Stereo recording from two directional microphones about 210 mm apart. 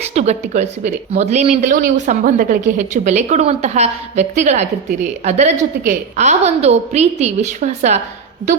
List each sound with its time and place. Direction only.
0.1 s a woman's voice: 35° right (ahead or behind)